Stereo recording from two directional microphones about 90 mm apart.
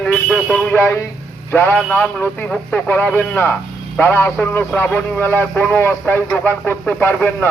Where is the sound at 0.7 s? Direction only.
25° left (ahead or behind).